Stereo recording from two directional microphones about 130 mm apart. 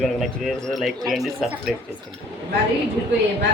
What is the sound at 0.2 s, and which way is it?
Speech, centre (ahead or behind).